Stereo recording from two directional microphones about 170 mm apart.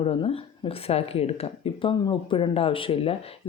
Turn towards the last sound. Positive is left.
turn(degrees=35)  # may be behind; listen again after turning